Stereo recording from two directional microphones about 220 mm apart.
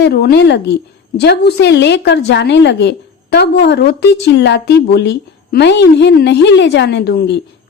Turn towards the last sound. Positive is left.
turn(degrees=45)  # may be behind; listen again after turning